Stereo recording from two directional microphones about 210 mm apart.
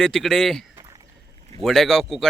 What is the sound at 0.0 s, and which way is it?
Speech, centre (ahead or behind).